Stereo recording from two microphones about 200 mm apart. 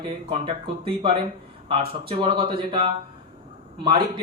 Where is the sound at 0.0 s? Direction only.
25° right (ahead or behind).